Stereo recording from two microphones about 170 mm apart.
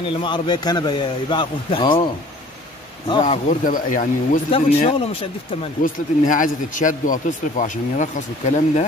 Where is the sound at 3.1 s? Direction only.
30° left (ahead or behind).